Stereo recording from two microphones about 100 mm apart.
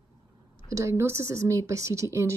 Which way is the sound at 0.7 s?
30° right (ahead or behind).